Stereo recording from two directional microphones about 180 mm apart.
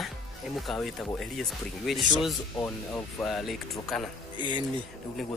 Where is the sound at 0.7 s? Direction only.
Centre (ahead or behind).